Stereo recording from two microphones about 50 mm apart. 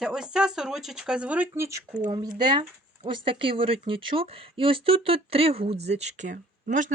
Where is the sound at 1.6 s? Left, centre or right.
Right.